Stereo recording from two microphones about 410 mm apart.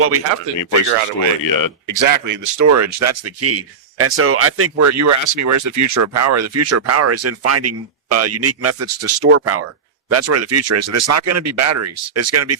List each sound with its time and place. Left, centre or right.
0.0 s speech: right
1.4 s speech: left
1.9 s speech: right